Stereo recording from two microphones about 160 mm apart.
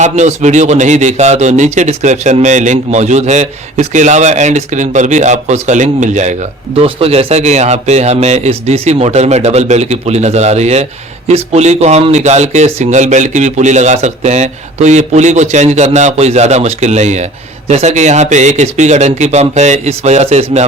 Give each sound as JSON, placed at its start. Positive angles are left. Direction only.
{"t": 0.0, "sound": "a man's voice", "side_deg": -45}